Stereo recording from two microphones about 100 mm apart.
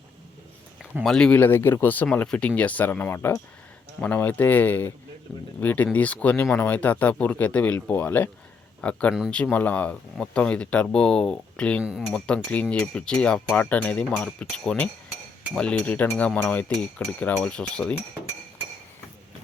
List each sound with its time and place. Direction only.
1.0 s speech: 5° left (ahead or behind)
1.4 s speech: 20° left (ahead or behind)
5.3 s speech: 5° left (ahead or behind)
5.6 s speech: 15° left (ahead or behind)
11.8 s speech: 5° right (ahead or behind)
12.6 s speech: 10° left (ahead or behind)